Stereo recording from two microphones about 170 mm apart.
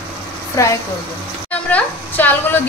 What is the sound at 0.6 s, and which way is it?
A woman's voice, 20° left (ahead or behind).